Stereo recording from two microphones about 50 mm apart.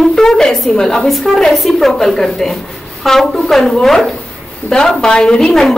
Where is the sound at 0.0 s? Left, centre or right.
Centre.